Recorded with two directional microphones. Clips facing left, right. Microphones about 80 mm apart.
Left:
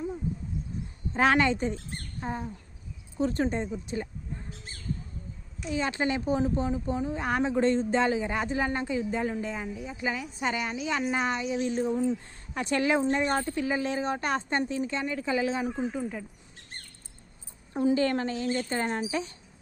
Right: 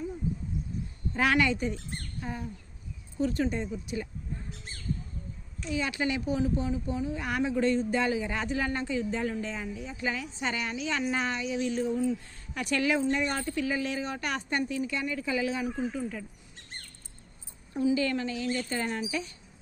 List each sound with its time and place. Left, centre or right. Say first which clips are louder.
1.1 s speech: left 3 dB; left
5.6 s speech: left 2 dB; left
15.7 s speech: left 1 dB; centre
17.7 s speech: left 2 dB; left